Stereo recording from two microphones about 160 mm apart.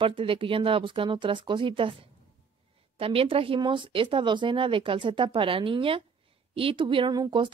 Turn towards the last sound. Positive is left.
turn(degrees=-25)  # may be behind; listen again after turning